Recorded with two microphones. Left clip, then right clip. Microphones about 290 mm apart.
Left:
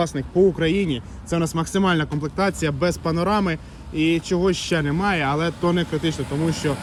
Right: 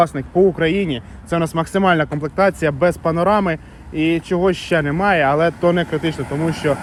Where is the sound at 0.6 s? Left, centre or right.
Centre.